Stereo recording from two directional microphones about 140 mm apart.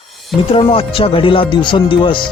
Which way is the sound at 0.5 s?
40° left (ahead or behind).